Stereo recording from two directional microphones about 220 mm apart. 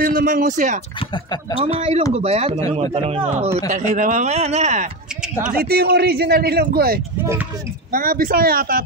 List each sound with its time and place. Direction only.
0.0 s speech: 40° right (ahead or behind)
0.9 s speech: 20° left (ahead or behind)
1.6 s speech: 30° right (ahead or behind)
5.5 s a man's voice: 45° right (ahead or behind)